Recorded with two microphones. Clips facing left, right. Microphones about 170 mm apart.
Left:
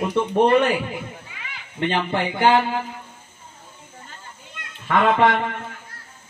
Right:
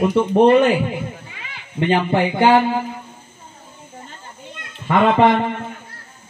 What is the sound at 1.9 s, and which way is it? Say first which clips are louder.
Speech: right 7 dB; 15° right (ahead or behind).